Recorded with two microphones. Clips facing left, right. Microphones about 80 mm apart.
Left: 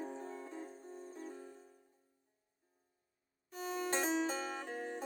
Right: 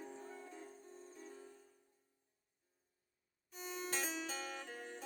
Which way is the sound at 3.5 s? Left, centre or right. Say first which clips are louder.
Left 6 dB; left.